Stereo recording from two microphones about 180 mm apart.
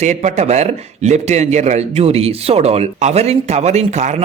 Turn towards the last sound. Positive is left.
turn(degrees=-40)  # may be behind; listen again after turning